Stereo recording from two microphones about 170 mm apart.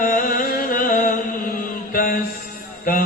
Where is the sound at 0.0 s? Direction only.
50° left (ahead or behind).